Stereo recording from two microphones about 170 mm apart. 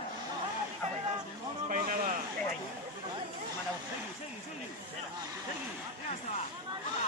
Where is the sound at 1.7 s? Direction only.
50° right (ahead or behind).